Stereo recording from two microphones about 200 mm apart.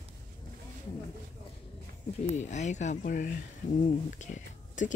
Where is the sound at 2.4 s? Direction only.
35° left (ahead or behind).